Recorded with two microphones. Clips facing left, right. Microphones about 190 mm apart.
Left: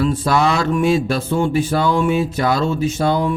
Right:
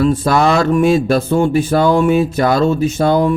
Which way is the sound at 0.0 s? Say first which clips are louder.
Right 4 dB; 45° right (ahead or behind).